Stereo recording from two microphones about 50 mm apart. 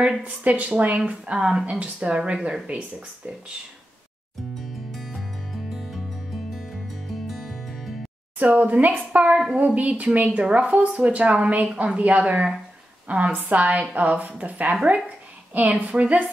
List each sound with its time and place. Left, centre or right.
0.2 s speech: right
4.6 s music: centre
7.2 s music: centre
8.4 s speech: right
10.9 s speech: centre
12.0 s a woman's voice: right
15.0 s a sound: right
15.7 s speech: right